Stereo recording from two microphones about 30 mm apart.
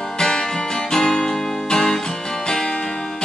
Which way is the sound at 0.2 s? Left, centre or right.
Left.